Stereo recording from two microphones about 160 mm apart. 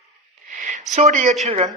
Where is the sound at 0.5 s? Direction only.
50° right (ahead or behind).